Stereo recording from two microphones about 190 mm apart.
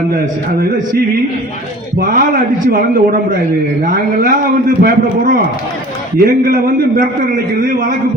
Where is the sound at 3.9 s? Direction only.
50° right (ahead or behind).